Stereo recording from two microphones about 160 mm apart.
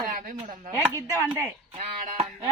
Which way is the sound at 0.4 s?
55° right (ahead or behind).